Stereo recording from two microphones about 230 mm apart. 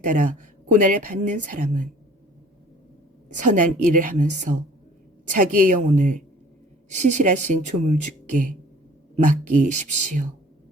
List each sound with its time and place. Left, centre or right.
0.0 s speech: right
3.2 s speech: right